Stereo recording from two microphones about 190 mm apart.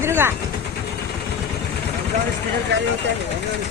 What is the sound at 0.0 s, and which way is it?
Vehicle, 10° right (ahead or behind).